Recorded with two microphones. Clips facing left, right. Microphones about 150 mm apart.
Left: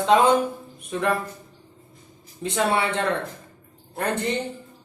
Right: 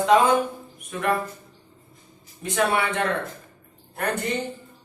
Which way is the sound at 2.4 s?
25° left (ahead or behind).